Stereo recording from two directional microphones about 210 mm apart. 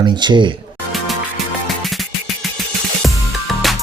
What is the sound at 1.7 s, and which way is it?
Music, centre (ahead or behind).